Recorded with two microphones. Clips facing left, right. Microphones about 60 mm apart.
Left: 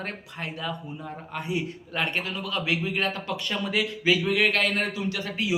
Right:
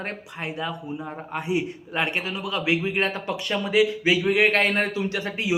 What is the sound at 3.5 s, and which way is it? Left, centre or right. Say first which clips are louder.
A man's voice: right 8 dB; centre.